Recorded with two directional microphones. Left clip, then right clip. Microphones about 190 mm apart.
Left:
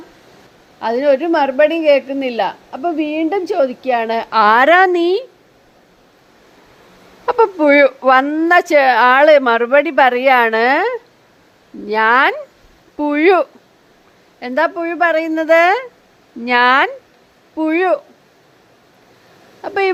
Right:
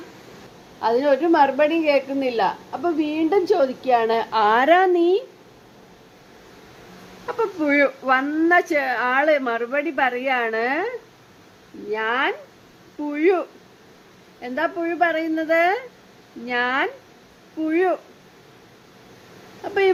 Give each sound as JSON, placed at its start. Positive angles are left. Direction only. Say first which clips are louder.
{"t": 0.8, "sound": "a woman's voice", "louder": "left 4 dB", "side_deg": 40}
{"t": 7.3, "sound": "a woman's voice", "louder": "left 10 dB", "side_deg": 45}
{"t": 14.4, "sound": "a woman's voice", "louder": "left 7 dB", "side_deg": 45}
{"t": 19.6, "sound": "a woman's voice", "louder": "left 3 dB", "side_deg": 40}